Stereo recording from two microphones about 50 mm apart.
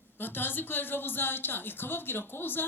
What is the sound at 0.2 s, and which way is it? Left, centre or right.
A woman's voice, left.